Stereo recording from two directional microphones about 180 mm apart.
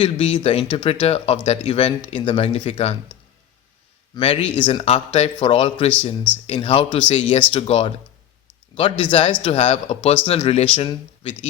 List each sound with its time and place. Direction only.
0.0 s speech: 30° left (ahead or behind)
4.1 s speech: 30° left (ahead or behind)